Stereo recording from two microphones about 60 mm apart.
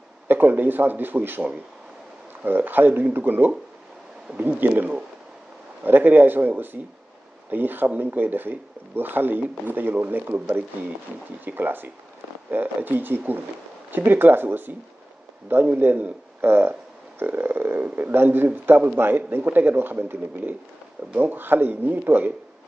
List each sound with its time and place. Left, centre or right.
0.3 s a man's voice: right
2.4 s a man's voice: right